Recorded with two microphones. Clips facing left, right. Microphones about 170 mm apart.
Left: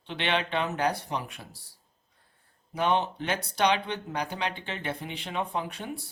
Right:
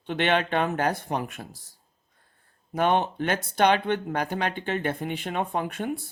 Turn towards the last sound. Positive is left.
turn(degrees=-50)  # may be behind; listen again after turning